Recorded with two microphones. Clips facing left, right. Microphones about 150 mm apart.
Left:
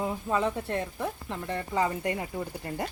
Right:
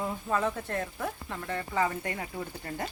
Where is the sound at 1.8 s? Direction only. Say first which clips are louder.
Left 2 dB; 10° left (ahead or behind).